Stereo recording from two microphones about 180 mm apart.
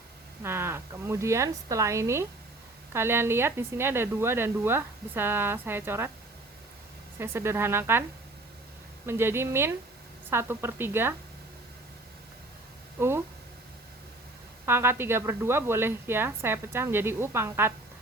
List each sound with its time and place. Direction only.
0.4 s speech: 15° right (ahead or behind)
7.2 s speech: 15° right (ahead or behind)
9.0 s speech: 15° right (ahead or behind)
13.0 s a sound: 15° right (ahead or behind)
14.7 s speech: 15° right (ahead or behind)